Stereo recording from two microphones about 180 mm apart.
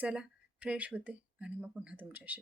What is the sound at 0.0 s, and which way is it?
Speech, 5° right (ahead or behind).